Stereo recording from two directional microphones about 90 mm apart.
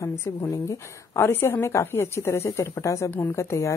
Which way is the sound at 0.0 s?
30° left (ahead or behind).